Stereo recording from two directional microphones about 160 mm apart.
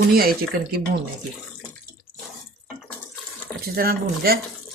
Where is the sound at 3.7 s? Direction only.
70° right (ahead or behind).